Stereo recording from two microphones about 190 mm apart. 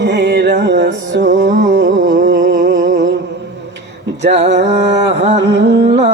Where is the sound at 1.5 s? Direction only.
60° right (ahead or behind).